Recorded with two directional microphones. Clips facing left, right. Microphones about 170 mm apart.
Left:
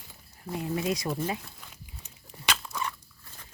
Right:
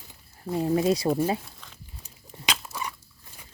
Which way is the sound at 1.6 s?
10° left (ahead or behind).